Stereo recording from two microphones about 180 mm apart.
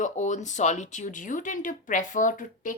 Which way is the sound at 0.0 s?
40° left (ahead or behind).